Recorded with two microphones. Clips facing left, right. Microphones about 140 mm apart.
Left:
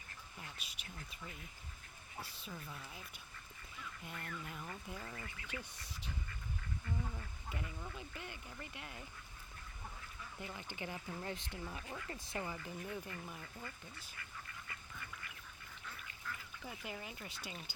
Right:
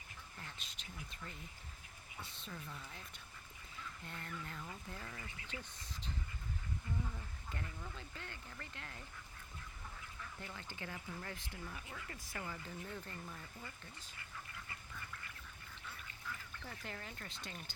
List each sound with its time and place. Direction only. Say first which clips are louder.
0.3 s speech: left 1 dB; 10° left (ahead or behind)
4.0 s speech: left 1 dB; 10° left (ahead or behind)
7.5 s speech: left 2 dB; 15° left (ahead or behind)
10.4 s speech: left 4 dB; 15° left (ahead or behind)
16.6 s speech: left 2 dB; 10° left (ahead or behind)